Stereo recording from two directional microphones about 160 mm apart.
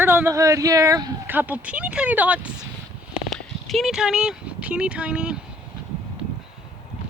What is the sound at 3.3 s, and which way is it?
Speech, centre (ahead or behind).